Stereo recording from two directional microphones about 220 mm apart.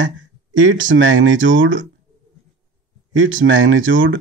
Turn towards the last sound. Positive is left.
turn(degrees=-60)  # may be behind; listen again after turning